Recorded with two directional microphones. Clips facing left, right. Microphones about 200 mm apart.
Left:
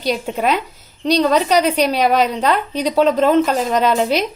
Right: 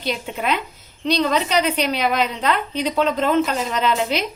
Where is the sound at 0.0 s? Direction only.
40° left (ahead or behind).